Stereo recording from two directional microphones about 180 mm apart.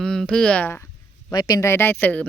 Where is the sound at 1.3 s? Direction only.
20° left (ahead or behind).